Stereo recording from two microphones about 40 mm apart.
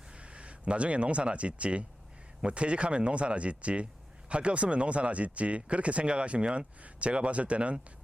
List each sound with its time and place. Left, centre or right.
0.1 s speech: right